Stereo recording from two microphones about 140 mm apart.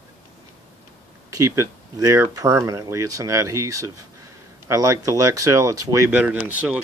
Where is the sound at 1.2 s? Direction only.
25° right (ahead or behind).